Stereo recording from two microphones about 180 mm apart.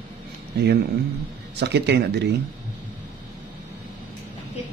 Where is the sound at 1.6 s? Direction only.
70° right (ahead or behind).